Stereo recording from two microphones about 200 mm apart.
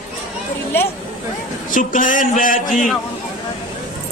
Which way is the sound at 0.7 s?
10° left (ahead or behind).